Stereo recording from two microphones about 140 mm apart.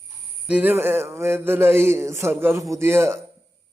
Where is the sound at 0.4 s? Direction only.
10° right (ahead or behind).